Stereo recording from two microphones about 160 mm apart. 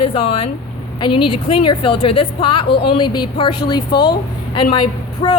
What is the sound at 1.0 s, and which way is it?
A woman's voice, 30° left (ahead or behind).